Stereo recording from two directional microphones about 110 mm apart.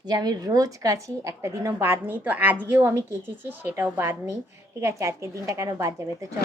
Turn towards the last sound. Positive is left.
turn(degrees=-30)  # may be behind; listen again after turning